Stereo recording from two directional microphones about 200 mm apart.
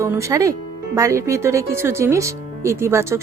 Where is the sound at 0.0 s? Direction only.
15° right (ahead or behind).